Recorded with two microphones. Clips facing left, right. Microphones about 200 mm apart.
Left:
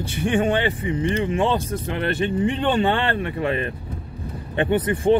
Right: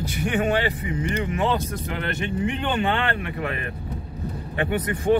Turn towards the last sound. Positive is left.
turn(degrees=30)  # may be behind; listen again after turning